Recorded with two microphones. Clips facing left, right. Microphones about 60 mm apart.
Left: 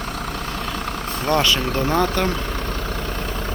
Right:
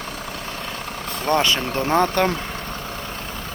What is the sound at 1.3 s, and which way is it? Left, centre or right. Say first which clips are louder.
Speech: even; right.